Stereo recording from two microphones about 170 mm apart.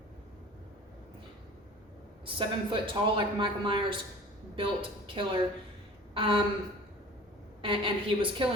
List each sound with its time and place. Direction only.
2.2 s a man's voice: 30° right (ahead or behind)
7.6 s a woman's voice: 30° right (ahead or behind)